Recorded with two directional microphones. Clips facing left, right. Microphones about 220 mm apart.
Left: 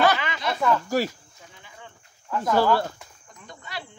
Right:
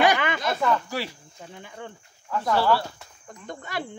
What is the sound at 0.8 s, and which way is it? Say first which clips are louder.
Speech: left 7 dB; 45° left (ahead or behind).